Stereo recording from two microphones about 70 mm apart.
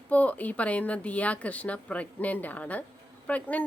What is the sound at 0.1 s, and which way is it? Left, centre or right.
A woman's voice, left.